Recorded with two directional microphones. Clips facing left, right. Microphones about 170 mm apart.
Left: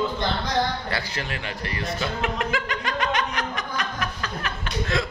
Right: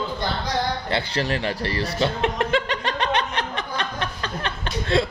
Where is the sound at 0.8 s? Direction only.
25° right (ahead or behind).